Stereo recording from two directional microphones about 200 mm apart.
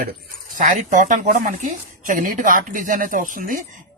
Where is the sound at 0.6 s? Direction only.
40° right (ahead or behind).